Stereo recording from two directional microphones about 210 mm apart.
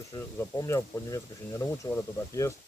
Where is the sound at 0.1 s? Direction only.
15° left (ahead or behind).